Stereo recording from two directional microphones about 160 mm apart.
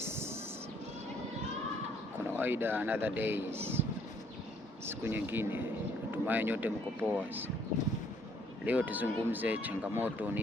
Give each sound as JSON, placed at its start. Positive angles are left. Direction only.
{"t": 0.0, "sound": "music", "side_deg": -15}
{"t": 2.1, "sound": "speech", "side_deg": -10}
{"t": 4.9, "sound": "speech", "side_deg": -15}
{"t": 8.6, "sound": "speech", "side_deg": -10}